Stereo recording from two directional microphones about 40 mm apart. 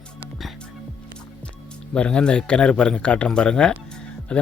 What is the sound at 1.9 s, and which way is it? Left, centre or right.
Speech, left.